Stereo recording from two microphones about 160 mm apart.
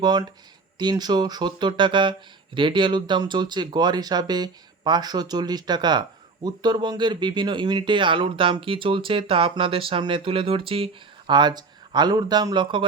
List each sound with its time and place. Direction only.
0.0 s speech: 25° right (ahead or behind)